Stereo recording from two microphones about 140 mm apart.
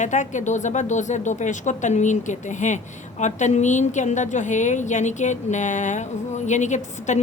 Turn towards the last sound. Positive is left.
turn(degrees=60)  # may be behind; listen again after turning